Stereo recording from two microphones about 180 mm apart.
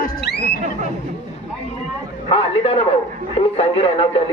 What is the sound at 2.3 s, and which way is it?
Speech, 35° left (ahead or behind).